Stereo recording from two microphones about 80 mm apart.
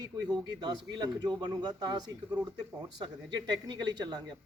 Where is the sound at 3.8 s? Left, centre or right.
Right.